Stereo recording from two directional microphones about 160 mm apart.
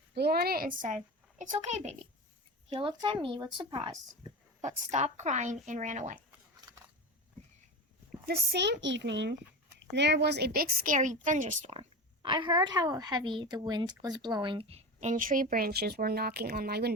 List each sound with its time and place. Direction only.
0.1 s a woman's voice: 90° right; by 3.9 s 30° right (ahead or behind)
4.6 s a woman's voice: 45° right (ahead or behind)
8.3 s a woman's voice: 85° right; by 15.1 s 35° right (ahead or behind)
15.1 s speech: 60° right (ahead or behind); by 16.9 s 80° right